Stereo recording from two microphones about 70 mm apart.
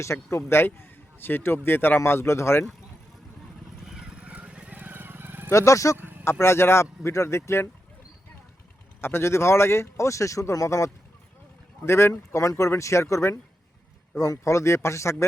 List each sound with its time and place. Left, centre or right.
0.0 s speech: left
3.8 s vehicle: centre; by 5.5 s right
5.5 s speech: left
6.0 s a sound: right
6.4 s speech: left
9.0 s speech: left